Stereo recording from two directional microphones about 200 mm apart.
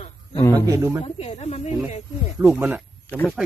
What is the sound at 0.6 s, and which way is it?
Speech, 15° right (ahead or behind).